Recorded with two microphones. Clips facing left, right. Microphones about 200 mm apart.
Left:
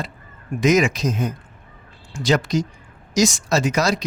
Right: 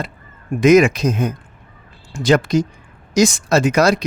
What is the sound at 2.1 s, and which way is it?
Speech, 50° right (ahead or behind).